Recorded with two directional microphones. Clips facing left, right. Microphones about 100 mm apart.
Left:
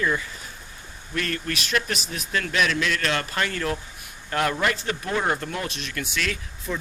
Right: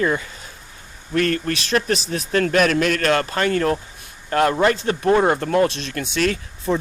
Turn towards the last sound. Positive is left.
turn(degrees=-40)  # may be behind; listen again after turning